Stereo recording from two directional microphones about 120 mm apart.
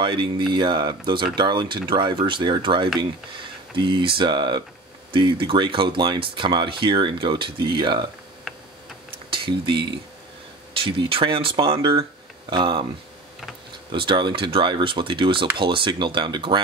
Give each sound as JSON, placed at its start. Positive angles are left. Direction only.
{"t": 0.0, "sound": "speech", "side_deg": -40}
{"t": 9.3, "sound": "speech", "side_deg": -45}
{"t": 13.9, "sound": "speech", "side_deg": -45}